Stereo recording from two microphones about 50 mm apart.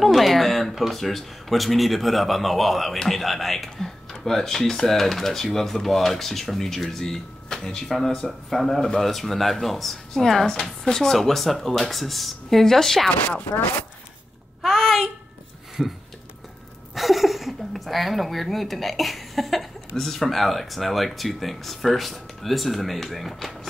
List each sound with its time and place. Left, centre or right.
0.0 s speech: centre
13.4 s speech: left
14.6 s a sound: centre
15.8 s speech: centre